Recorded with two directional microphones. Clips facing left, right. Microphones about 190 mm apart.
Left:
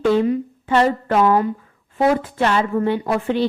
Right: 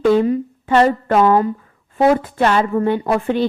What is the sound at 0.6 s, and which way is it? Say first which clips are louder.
A woman's voice: right 3 dB; 50° right (ahead or behind).